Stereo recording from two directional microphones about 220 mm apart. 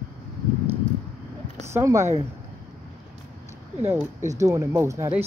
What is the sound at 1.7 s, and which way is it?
Speech, 15° right (ahead or behind).